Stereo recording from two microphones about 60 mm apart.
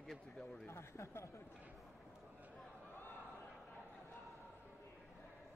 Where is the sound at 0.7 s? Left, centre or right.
Left.